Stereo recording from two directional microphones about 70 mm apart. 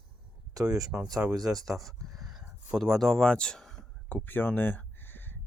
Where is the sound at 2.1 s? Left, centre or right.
Centre.